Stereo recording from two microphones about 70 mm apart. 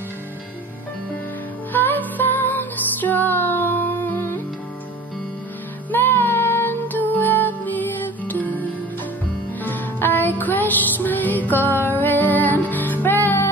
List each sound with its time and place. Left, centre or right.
1.7 s music: left
5.9 s music: left
9.7 s music: left